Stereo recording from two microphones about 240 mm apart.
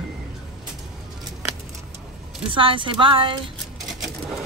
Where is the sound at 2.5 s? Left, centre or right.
Right.